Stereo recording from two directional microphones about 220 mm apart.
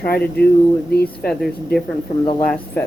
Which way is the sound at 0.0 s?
45° left (ahead or behind).